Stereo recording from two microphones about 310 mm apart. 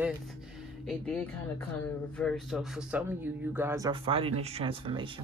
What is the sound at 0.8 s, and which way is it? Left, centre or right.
Speech, centre.